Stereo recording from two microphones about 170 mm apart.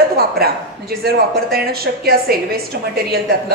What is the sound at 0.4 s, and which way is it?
A woman's voice, 65° right (ahead or behind).